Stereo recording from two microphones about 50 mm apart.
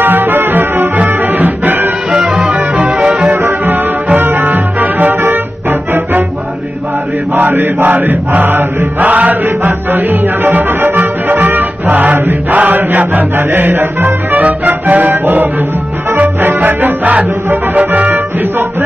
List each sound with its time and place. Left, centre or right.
0.0 s music: right
2.1 s music: centre
3.4 s music: right
7.3 s chant: right
9.9 s music: right
14.4 s music: right